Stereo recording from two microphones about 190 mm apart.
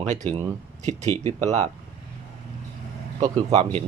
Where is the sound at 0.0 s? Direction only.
40° right (ahead or behind).